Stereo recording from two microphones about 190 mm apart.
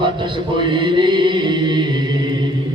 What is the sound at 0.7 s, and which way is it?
A man's voice, 25° right (ahead or behind).